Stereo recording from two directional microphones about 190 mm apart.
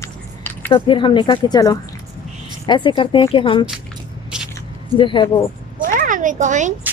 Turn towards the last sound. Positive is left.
turn(degrees=-40)  # may be behind; listen again after turning